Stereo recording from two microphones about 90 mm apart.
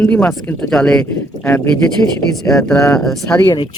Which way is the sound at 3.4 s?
55° left (ahead or behind).